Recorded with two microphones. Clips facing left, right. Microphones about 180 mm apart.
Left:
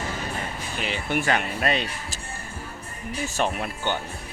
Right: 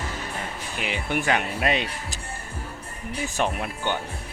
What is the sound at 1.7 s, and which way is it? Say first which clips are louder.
Speech: even; 15° right (ahead or behind).